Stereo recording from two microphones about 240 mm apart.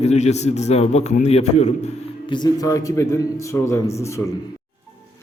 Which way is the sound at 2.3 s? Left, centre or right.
Centre.